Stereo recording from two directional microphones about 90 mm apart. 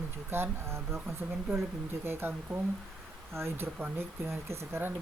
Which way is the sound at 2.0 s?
25° right (ahead or behind).